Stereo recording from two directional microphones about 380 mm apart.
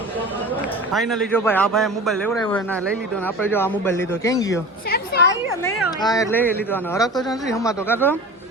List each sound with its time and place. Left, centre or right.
0.9 s a man's voice: centre
4.9 s a sound: left
5.3 s speech: centre